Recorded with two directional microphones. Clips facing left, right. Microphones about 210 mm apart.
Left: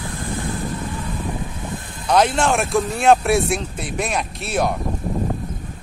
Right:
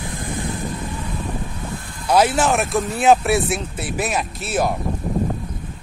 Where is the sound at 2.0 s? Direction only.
5° right (ahead or behind).